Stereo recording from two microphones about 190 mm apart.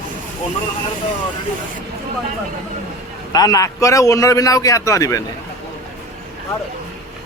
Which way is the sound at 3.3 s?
20° left (ahead or behind).